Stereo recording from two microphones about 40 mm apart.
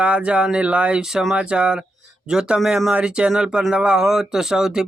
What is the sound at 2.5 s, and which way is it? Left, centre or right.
Speech, centre.